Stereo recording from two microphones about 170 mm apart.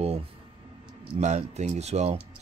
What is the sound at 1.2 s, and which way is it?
Speech, 45° right (ahead or behind).